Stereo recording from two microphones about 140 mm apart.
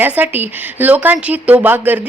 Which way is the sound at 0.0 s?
15° right (ahead or behind).